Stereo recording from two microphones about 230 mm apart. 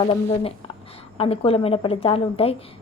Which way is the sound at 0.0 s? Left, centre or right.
Left.